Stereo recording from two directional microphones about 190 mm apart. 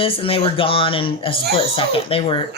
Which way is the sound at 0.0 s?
30° left (ahead or behind).